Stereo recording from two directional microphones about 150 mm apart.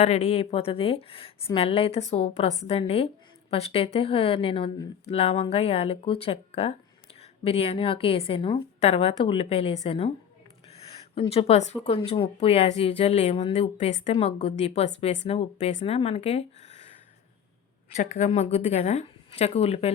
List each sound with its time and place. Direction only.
0.0 s speech: 45° left (ahead or behind)
17.9 s speech: 55° left (ahead or behind)